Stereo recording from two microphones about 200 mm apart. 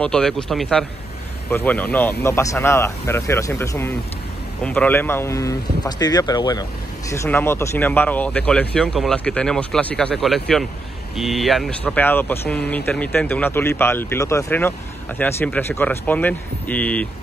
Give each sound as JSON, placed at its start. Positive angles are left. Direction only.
{"t": 0.0, "sound": "speech", "side_deg": 5}